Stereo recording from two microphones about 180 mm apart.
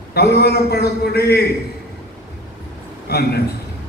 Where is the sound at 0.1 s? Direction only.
60° left (ahead or behind).